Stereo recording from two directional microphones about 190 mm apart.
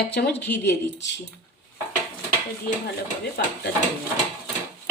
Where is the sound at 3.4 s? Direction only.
55° left (ahead or behind).